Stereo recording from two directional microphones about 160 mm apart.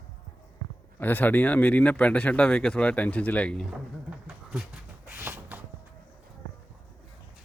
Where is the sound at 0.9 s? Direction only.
10° left (ahead or behind).